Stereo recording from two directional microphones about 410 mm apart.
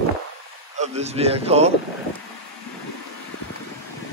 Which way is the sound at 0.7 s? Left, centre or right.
Centre.